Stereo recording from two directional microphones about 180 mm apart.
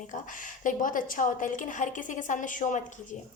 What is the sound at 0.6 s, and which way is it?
A woman's voice, 45° left (ahead or behind).